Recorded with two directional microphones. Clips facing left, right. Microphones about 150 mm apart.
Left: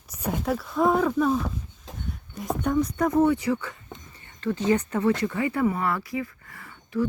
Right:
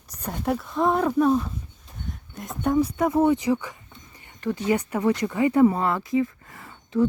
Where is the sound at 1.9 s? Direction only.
90° left.